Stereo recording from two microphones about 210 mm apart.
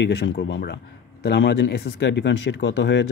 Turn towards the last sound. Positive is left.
turn(degrees=60)  # may be behind; listen again after turning